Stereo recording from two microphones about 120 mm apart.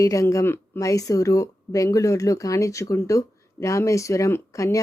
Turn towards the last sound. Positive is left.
turn(degrees=25)  # may be behind; listen again after turning